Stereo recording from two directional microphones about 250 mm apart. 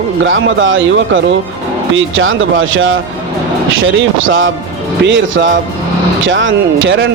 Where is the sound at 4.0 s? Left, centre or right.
Right.